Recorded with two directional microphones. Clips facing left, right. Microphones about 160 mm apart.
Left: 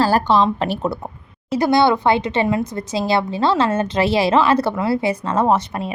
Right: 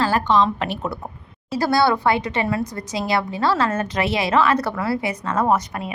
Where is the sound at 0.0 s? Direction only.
35° left (ahead or behind).